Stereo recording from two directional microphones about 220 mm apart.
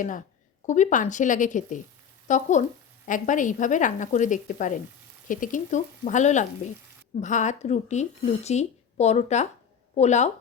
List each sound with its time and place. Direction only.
0.7 s a woman's voice: 35° left (ahead or behind)